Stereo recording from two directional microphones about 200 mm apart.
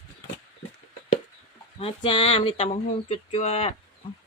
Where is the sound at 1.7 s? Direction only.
30° left (ahead or behind).